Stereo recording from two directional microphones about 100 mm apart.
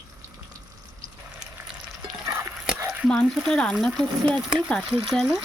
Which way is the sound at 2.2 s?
30° right (ahead or behind).